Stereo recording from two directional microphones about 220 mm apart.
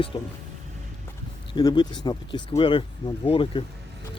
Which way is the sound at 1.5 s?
20° left (ahead or behind).